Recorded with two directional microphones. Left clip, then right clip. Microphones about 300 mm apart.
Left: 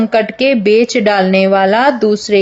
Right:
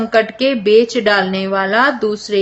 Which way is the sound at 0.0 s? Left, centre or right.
Centre.